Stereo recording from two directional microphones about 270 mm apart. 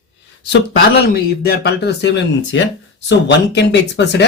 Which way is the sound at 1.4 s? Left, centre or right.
Left.